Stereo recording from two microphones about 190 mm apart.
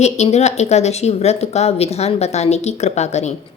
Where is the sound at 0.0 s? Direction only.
35° left (ahead or behind).